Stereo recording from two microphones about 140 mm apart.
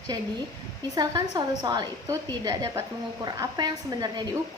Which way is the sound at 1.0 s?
25° right (ahead or behind).